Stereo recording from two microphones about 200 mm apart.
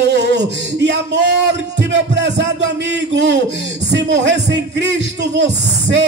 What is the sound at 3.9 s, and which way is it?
Speech, 60° right (ahead or behind).